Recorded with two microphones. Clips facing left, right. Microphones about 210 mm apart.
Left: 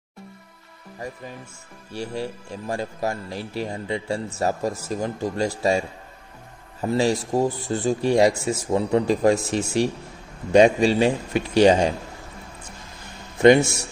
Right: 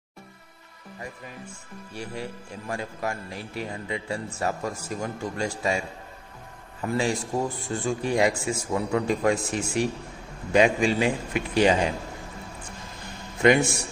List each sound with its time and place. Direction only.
2.0 s speech: 30° left (ahead or behind)
5.4 s speech: 40° left (ahead or behind)
6.8 s speech: 35° left (ahead or behind)
13.4 s speech: 30° left (ahead or behind)